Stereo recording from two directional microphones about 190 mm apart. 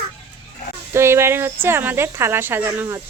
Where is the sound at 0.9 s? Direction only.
15° right (ahead or behind).